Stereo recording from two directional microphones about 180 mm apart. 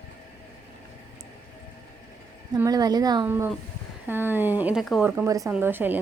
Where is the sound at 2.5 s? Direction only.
20° right (ahead or behind); by 5.1 s centre (ahead or behind).